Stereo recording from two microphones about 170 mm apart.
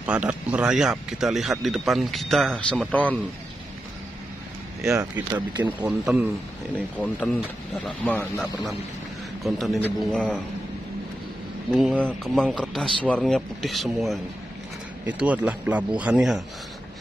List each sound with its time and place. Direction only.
0.0 s speech: 10° right (ahead or behind); by 3.2 s 10° left (ahead or behind)
5.6 s a man's voice: 10° right (ahead or behind)
7.0 s speech: 10° left (ahead or behind)
11.7 s a man's voice: centre (ahead or behind)